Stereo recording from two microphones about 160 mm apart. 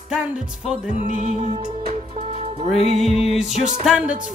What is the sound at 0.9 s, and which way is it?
Music, 50° right (ahead or behind).